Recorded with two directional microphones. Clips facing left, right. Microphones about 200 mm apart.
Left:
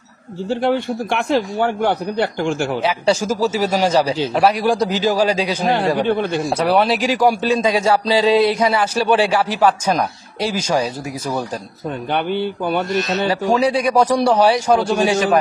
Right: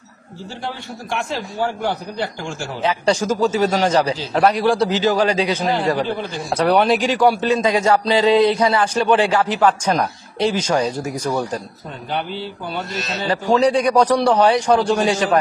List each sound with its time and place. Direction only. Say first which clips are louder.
0.5 s a man's voice: left 12 dB; 60° left (ahead or behind)
2.8 s a man's voice: right 4 dB; 10° left (ahead or behind)
5.7 s a man's voice: left 3 dB; 60° left (ahead or behind)
6.6 s a man's voice: right 2 dB; centre (ahead or behind)
12.1 s a man's voice: left 5 dB; 60° left (ahead or behind)
13.3 s a man's voice: right 3 dB; 10° left (ahead or behind)